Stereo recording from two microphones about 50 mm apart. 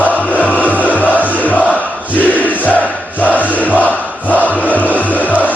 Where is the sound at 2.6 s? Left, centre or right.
Left.